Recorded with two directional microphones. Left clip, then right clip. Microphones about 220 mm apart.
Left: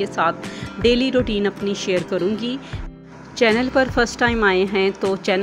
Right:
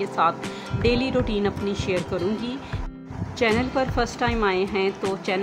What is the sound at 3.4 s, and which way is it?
Speech, 20° left (ahead or behind).